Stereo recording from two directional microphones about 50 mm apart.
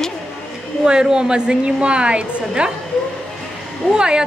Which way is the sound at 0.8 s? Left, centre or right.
Centre.